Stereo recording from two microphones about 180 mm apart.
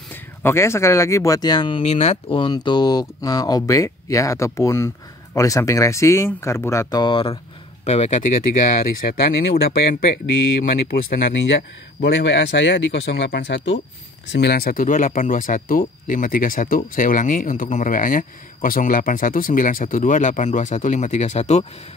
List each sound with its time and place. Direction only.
0.1 s speech: 15° left (ahead or behind); by 7.3 s 30° left (ahead or behind)
7.8 s speech: 40° left (ahead or behind)
9.2 s speech: 60° left (ahead or behind)
11.3 s speech: 90° left; by 21.6 s 40° left (ahead or behind)